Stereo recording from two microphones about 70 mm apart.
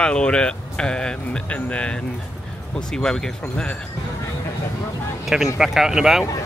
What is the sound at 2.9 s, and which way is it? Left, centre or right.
Speech, centre.